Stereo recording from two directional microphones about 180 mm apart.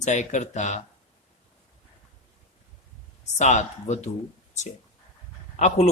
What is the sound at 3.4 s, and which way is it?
Speech, 40° left (ahead or behind).